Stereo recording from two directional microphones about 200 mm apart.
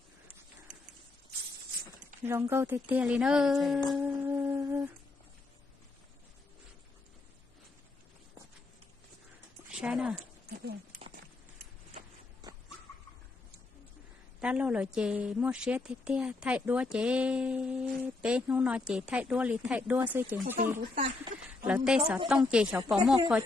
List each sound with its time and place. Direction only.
2.2 s a woman's voice: 10° right (ahead or behind)
4.0 s humming: 10° right (ahead or behind)
9.7 s dog: 5° right (ahead or behind)
10.5 s a sound: 50° right (ahead or behind)
14.4 s a woman's voice: 5° right (ahead or behind)
21.6 s a woman's voice: 5° right (ahead or behind)